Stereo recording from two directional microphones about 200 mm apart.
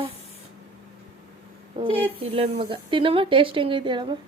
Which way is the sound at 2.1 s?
30° right (ahead or behind).